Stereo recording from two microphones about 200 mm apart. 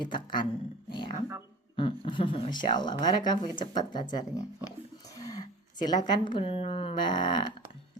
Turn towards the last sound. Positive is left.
turn(degrees=20)  # may be behind; listen again after turning